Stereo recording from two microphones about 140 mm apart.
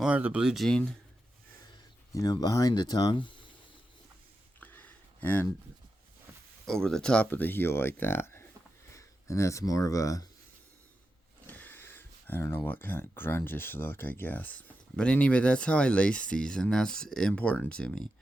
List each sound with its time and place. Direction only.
0.0 s speech: 10° right (ahead or behind); by 0.9 s 5° left (ahead or behind)
2.1 s speech: 25° left (ahead or behind)
4.6 s a sound: 10° left (ahead or behind)
6.7 s speech: 5° left (ahead or behind); by 10.2 s 25° left (ahead or behind)
11.4 s speech: 15° left (ahead or behind)